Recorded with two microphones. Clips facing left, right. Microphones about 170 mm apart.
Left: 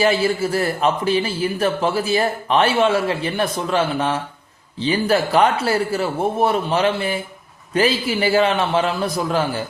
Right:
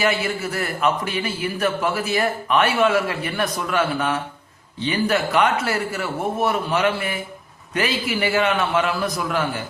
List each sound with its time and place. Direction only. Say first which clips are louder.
0.0 s a man's voice: left 5 dB; 30° left (ahead or behind)